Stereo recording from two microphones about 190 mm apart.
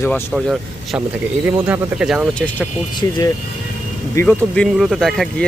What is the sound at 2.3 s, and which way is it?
Speech, 5° left (ahead or behind).